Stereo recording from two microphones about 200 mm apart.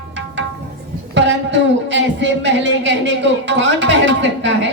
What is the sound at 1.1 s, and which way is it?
A man's voice, 60° right (ahead or behind).